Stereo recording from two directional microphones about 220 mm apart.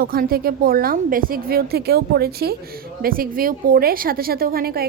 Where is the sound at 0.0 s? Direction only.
40° right (ahead or behind).